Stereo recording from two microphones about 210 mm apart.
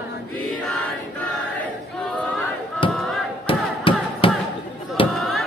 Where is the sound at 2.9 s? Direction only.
Centre (ahead or behind).